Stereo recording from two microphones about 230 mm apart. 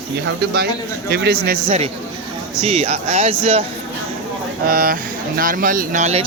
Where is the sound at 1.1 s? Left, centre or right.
Right.